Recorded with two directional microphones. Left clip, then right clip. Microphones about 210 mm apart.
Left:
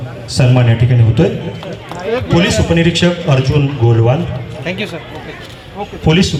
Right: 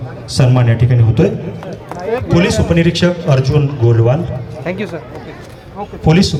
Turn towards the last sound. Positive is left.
turn(degrees=35)  # may be behind; listen again after turning